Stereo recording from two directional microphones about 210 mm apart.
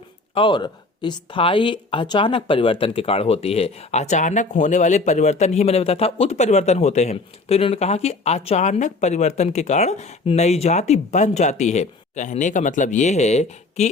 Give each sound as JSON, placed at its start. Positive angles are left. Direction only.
{"t": 0.3, "sound": "speech", "side_deg": 20}